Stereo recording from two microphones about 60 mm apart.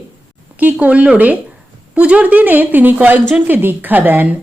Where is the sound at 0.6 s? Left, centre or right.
Right.